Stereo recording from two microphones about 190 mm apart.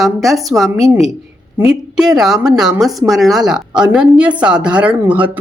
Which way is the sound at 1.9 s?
5° right (ahead or behind).